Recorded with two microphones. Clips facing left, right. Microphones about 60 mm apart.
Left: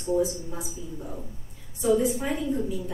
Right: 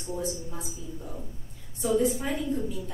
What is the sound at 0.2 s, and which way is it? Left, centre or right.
Speech, centre.